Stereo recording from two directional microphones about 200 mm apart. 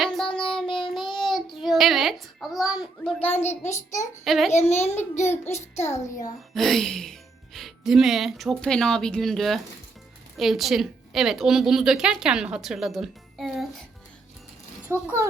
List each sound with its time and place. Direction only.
0.0 s child singing: centre (ahead or behind)
3.2 s a child's voice: 30° left (ahead or behind)
3.6 s a child's voice: 15° left (ahead or behind)
4.2 s a woman's voice: centre (ahead or behind)
4.5 s a child's voice: 30° left (ahead or behind)
4.9 s a child's voice: 15° left (ahead or behind)
5.7 s a child's voice: 35° left (ahead or behind)
6.5 s a woman's voice: centre (ahead or behind)
15.0 s speech: 15° right (ahead or behind)